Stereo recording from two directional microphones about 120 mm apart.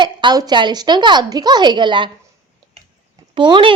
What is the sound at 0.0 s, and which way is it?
A woman's voice, 40° right (ahead or behind).